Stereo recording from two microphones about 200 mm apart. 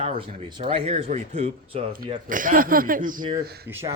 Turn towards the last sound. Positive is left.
turn(degrees=-15)  # may be behind; listen again after turning